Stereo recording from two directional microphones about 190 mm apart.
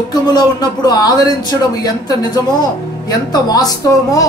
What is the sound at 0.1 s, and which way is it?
A man's voice, 20° left (ahead or behind).